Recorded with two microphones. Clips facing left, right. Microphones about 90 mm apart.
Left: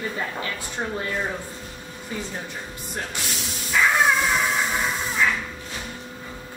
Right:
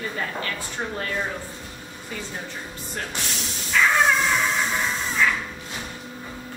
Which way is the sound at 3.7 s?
15° left (ahead or behind).